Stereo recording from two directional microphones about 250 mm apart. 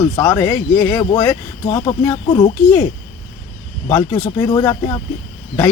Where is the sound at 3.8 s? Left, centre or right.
Centre.